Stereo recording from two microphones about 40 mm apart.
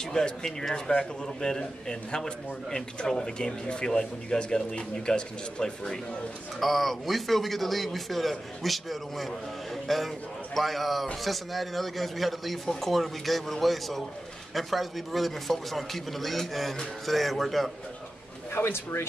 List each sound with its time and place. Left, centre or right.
0.0 s speech: centre
6.6 s a man's voice: centre
18.5 s speech: left